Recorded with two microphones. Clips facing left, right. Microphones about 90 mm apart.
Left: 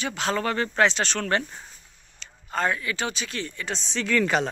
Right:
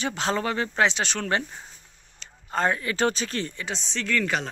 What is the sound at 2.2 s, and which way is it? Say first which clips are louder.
Speech: right 1 dB; 30° right (ahead or behind).